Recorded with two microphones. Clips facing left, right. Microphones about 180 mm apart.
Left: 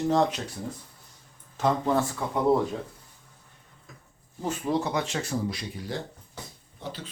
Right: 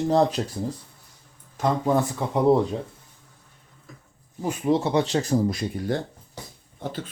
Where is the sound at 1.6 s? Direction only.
15° right (ahead or behind).